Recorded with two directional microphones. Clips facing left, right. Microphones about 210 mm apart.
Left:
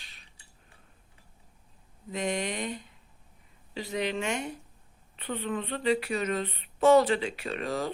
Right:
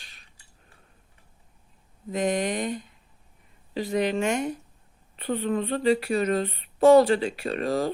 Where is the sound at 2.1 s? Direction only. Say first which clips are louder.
Right 6 dB; 45° right (ahead or behind).